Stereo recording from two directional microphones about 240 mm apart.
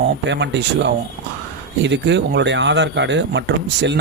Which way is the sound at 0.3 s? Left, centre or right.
Right.